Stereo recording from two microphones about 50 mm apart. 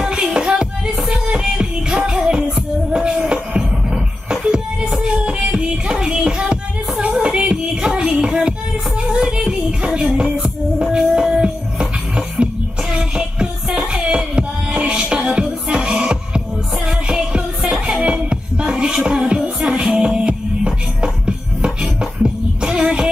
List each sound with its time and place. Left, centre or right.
0.0 s music: centre